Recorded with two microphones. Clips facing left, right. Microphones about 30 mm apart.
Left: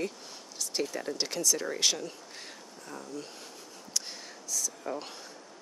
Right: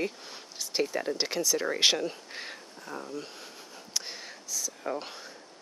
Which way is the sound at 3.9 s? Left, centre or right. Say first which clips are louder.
Right 1 dB; centre.